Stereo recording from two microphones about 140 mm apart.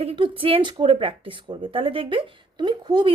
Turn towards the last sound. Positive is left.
turn(degrees=-35)  # may be behind; listen again after turning